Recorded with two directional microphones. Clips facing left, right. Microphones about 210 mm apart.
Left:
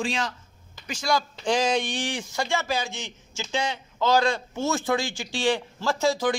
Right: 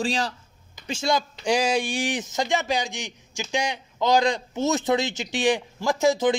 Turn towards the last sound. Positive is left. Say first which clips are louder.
# right 3 dB
turn(degrees=-20)  # may be behind; listen again after turning